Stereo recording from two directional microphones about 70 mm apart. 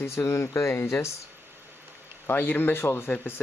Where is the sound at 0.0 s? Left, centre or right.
Left.